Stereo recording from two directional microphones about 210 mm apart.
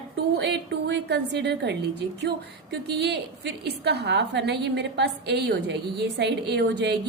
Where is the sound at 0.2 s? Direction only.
55° right (ahead or behind).